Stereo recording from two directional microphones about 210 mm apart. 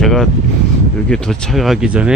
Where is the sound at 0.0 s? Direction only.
Centre (ahead or behind).